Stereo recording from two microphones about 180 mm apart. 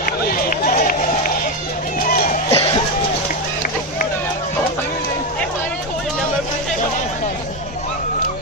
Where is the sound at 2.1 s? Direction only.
50° left (ahead or behind).